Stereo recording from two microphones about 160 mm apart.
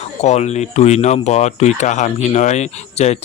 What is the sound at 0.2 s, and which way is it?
Speech, 45° left (ahead or behind).